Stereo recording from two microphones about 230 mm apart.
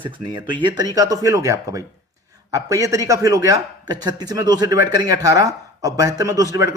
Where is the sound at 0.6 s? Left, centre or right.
Centre.